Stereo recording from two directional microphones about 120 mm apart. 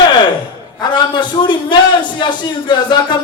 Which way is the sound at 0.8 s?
40° left (ahead or behind).